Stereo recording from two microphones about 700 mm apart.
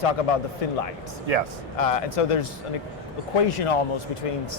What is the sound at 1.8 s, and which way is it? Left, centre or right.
Speech, left.